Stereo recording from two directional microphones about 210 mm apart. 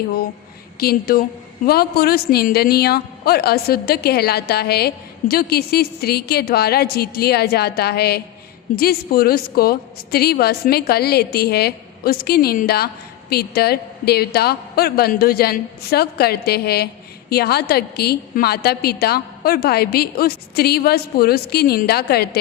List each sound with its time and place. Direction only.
0.8 s a woman's voice: 45° left (ahead or behind)